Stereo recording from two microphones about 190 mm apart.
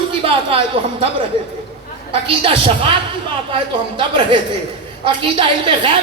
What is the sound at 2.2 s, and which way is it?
Speech, 30° right (ahead or behind).